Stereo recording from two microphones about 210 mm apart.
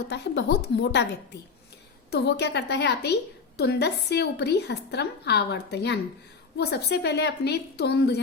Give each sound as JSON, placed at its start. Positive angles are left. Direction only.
{"t": 0.1, "sound": "a woman's voice", "side_deg": 55}